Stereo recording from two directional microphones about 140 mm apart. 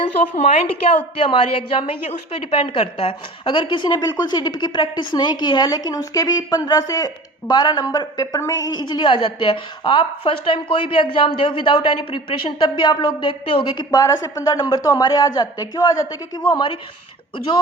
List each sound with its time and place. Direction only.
0.0 s a woman's voice: 45° left (ahead or behind)
13.9 s a woman's voice: 25° left (ahead or behind)